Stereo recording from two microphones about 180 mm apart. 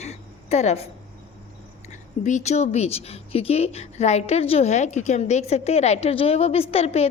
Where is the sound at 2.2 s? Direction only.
40° left (ahead or behind).